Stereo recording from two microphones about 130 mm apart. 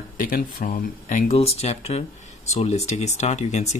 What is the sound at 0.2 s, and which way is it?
Speech, 90° left.